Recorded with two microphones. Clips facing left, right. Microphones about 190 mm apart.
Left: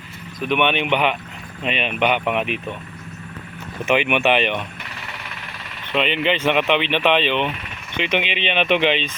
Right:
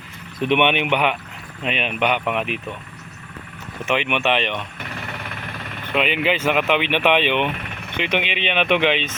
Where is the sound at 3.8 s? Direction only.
5° left (ahead or behind).